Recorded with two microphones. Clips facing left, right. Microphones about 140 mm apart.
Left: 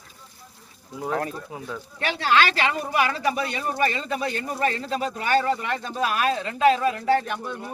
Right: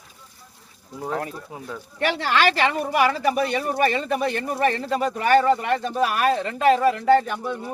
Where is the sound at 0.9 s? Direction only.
Centre (ahead or behind).